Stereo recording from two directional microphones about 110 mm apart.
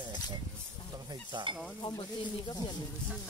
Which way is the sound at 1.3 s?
45° right (ahead or behind).